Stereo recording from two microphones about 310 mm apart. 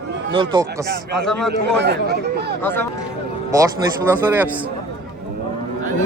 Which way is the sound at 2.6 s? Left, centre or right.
Centre.